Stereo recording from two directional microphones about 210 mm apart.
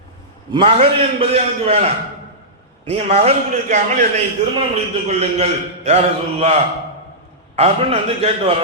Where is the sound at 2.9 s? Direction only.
30° right (ahead or behind).